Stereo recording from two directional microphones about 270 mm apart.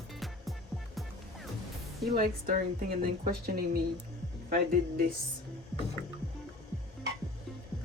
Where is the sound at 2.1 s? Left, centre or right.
Right.